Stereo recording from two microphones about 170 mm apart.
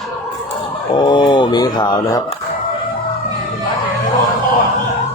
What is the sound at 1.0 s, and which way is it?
Speech, 25° left (ahead or behind).